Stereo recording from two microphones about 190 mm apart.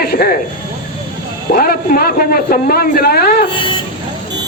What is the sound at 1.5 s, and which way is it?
Speech, 50° left (ahead or behind).